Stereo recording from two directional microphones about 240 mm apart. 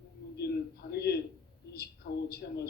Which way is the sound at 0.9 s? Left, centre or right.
Left.